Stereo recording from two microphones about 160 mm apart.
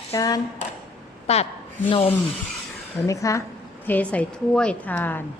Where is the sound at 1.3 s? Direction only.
40° left (ahead or behind).